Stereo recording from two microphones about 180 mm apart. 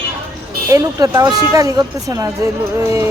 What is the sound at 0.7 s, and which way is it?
A woman's voice, 20° right (ahead or behind).